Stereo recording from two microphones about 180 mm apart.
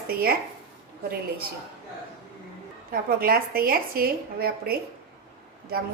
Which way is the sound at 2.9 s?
55° right (ahead or behind).